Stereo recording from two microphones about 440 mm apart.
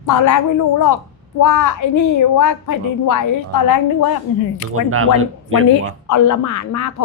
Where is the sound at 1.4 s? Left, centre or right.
Left.